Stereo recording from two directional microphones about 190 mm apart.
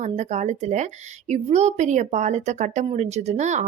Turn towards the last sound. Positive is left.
turn(degrees=-40)  # may be behind; listen again after turning